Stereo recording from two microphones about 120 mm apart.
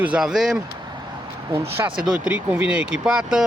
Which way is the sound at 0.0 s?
5° right (ahead or behind).